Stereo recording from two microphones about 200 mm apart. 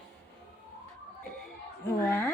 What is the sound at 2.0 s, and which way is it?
Speech, 10° left (ahead or behind).